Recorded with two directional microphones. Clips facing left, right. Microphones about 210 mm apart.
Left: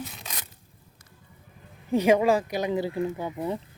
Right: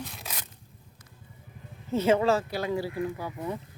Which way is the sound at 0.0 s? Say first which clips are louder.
Left 1 dB; centre (ahead or behind).